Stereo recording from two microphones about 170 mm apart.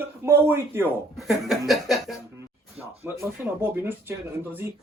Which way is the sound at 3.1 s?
10° right (ahead or behind).